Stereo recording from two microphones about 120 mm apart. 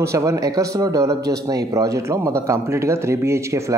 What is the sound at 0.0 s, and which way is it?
Speech, 25° right (ahead or behind).